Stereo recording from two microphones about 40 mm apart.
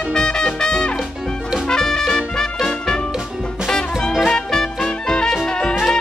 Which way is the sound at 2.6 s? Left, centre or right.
Centre.